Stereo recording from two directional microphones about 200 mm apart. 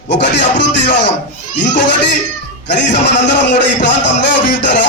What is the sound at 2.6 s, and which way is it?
A man's voice, 60° left (ahead or behind).